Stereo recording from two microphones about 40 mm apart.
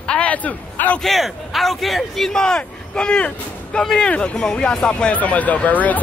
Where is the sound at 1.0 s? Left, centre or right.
Centre.